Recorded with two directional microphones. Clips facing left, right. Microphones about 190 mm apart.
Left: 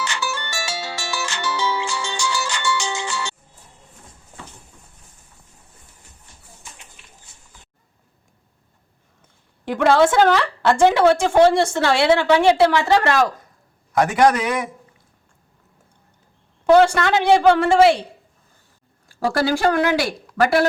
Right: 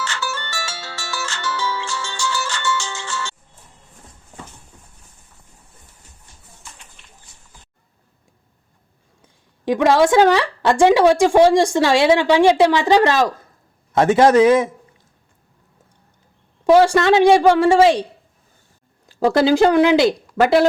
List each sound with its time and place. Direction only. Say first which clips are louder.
0.0 s music: even; 15° left (ahead or behind)
9.2 s a woman's voice: right 7 dB; 15° right (ahead or behind)
16.6 s a woman's voice: right 2 dB; 15° right (ahead or behind)
19.2 s speech: right 5 dB; 20° right (ahead or behind)